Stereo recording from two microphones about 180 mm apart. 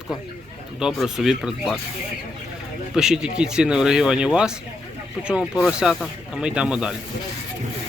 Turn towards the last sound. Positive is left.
turn(degrees=-5)  # may be behind; listen again after turning